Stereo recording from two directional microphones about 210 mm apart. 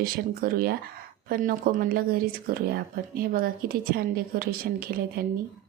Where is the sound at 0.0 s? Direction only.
45° right (ahead or behind).